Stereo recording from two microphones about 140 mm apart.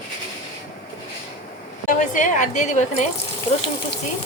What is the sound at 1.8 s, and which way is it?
A woman's voice, 65° left (ahead or behind).